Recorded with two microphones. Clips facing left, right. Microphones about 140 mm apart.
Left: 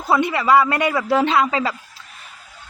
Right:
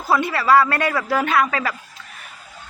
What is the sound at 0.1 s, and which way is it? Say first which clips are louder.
A man's voice: left 1 dB; 20° left (ahead or behind).